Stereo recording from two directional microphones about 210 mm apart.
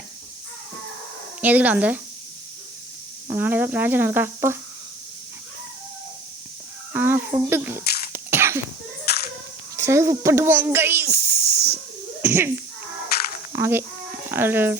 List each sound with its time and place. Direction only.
1.4 s speech: 5° right (ahead or behind)
3.2 s speech: 10° right (ahead or behind)
6.9 s speech: 10° right (ahead or behind)
7.9 s cough: 50° left (ahead or behind)
8.1 s sneeze: 10° right (ahead or behind)
9.7 s a child's voice: 15° right (ahead or behind)
13.5 s speech: 10° right (ahead or behind)